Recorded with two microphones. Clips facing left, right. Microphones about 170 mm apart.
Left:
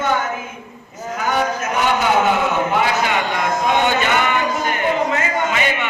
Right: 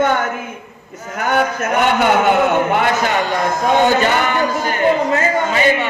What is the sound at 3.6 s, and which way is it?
A man's voice, 40° right (ahead or behind).